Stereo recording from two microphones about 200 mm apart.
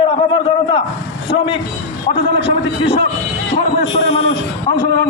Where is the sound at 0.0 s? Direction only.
25° left (ahead or behind).